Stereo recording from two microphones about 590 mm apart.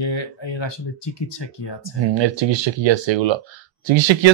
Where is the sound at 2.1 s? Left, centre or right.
Right.